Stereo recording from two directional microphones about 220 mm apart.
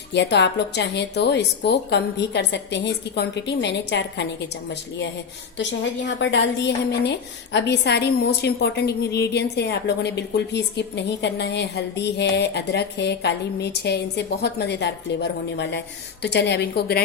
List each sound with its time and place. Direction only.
0.1 s a woman's voice: 50° left (ahead or behind)